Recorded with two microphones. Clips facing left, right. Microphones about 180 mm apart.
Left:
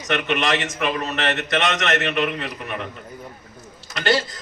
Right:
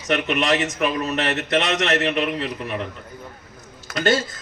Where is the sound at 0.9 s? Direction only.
65° left (ahead or behind).